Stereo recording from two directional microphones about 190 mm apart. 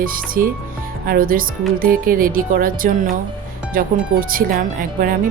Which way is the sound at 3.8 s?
45° right (ahead or behind).